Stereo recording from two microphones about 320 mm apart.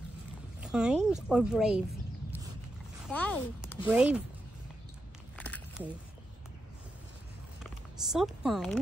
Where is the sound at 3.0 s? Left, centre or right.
Centre.